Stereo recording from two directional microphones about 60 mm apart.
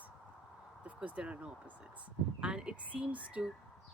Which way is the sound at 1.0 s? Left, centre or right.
Right.